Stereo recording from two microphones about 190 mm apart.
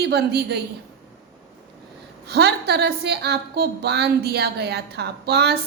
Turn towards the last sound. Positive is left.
turn(degrees=-60)  # may be behind; listen again after turning